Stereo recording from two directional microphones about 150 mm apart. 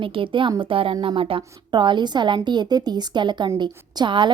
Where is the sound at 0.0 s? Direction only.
35° right (ahead or behind).